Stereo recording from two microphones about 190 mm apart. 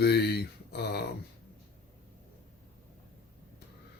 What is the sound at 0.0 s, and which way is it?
Speech, 60° left (ahead or behind).